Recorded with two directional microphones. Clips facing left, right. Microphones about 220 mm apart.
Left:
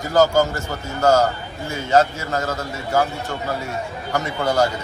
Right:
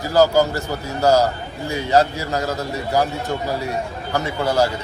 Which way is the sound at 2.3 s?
10° right (ahead or behind).